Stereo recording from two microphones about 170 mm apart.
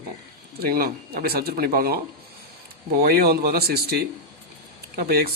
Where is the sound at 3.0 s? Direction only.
65° right (ahead or behind).